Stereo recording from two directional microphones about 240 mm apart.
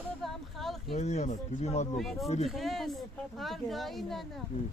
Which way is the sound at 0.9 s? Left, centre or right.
Left.